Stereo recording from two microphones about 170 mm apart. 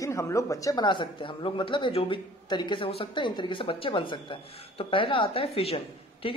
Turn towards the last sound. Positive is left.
turn(degrees=35)  # may be behind; listen again after turning